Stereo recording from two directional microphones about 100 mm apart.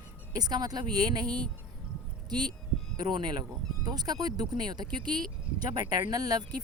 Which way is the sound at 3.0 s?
45° right (ahead or behind).